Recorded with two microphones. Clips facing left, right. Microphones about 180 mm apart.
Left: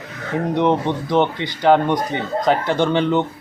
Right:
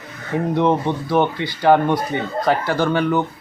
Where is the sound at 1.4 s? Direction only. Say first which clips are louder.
Even; 20° left (ahead or behind).